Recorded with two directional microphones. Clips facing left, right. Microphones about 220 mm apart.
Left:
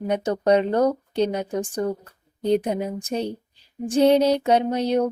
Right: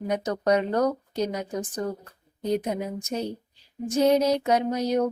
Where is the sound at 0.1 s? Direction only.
30° left (ahead or behind).